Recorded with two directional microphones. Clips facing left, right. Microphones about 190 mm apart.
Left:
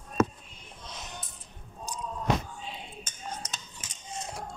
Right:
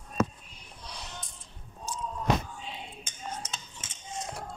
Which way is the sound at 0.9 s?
20° left (ahead or behind).